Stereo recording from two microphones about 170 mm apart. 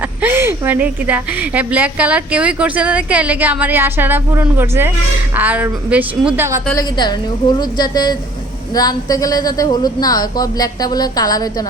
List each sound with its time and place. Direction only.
0.2 s a woman's voice: 15° right (ahead or behind)
6.7 s a woman's voice: 25° left (ahead or behind)